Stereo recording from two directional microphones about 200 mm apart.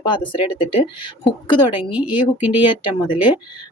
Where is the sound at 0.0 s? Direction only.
25° left (ahead or behind).